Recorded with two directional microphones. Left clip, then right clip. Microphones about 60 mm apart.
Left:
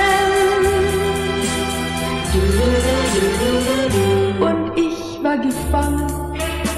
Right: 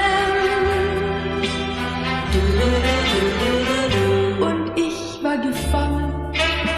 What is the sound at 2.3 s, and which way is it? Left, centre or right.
Music, right.